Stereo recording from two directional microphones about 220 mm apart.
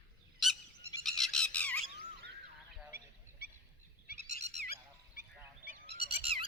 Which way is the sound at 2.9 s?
40° left (ahead or behind).